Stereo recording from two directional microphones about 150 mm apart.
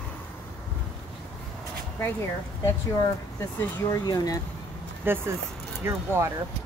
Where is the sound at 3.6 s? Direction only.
25° left (ahead or behind).